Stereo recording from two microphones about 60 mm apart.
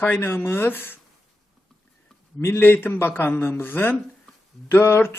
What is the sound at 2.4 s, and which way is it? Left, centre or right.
A man's voice, left.